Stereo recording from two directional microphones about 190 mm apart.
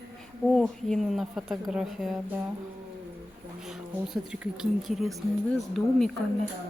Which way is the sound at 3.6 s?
Centre (ahead or behind).